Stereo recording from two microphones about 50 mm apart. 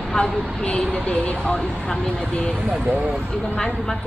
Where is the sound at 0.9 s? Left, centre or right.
Left.